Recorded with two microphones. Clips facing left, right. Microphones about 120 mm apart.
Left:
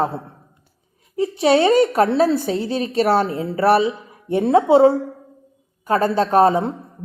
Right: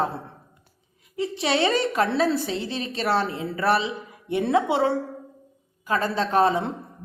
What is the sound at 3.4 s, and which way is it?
A woman's voice, 30° left (ahead or behind).